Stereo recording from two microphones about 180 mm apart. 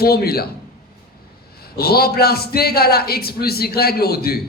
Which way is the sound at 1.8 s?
60° left (ahead or behind).